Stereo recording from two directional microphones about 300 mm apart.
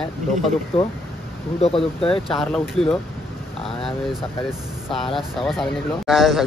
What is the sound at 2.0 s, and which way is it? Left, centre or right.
Speech, centre.